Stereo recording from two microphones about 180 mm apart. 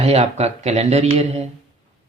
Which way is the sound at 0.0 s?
35° right (ahead or behind).